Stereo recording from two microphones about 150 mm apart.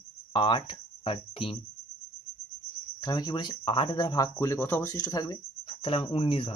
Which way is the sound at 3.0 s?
25° left (ahead or behind).